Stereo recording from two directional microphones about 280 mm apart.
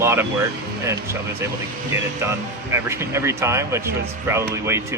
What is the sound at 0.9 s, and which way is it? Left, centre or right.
Speech, centre.